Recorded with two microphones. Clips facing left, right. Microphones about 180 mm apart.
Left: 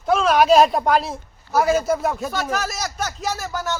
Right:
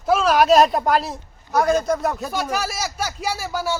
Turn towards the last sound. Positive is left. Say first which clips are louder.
# right 2 dB
turn(degrees=-10)  # may be behind; listen again after turning